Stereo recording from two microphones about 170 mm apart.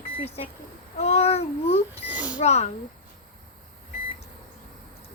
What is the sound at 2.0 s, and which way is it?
Speech, 10° right (ahead or behind).